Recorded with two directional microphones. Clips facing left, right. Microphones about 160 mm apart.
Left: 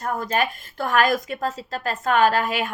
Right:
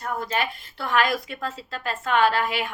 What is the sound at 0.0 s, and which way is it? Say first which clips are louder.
A woman's voice: left 3 dB; 45° left (ahead or behind).